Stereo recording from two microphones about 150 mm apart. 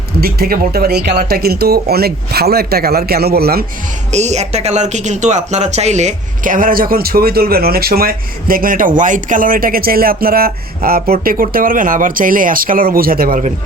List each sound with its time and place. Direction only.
0.2 s speech: 90° right
4.1 s speech: 50° right (ahead or behind); by 13.4 s 75° right (ahead or behind)